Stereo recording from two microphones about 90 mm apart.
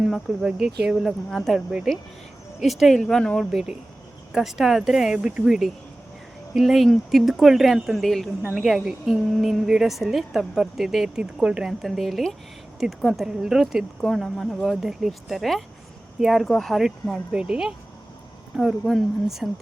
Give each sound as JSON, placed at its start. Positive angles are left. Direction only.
{"t": 0.0, "sound": "speech", "side_deg": -5}
{"t": 1.3, "sound": "a woman's voice", "side_deg": 0}
{"t": 3.5, "sound": "a woman's voice", "side_deg": -10}
{"t": 8.4, "sound": "a woman's voice", "side_deg": -10}
{"t": 14.0, "sound": "a woman's voice", "side_deg": 5}